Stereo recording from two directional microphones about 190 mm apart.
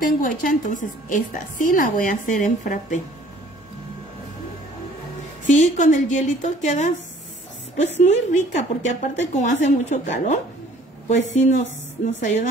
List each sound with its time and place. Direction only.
0.0 s a woman's voice: 45° left (ahead or behind)
5.5 s speech: 40° left (ahead or behind)
8.0 s speech: 40° left (ahead or behind)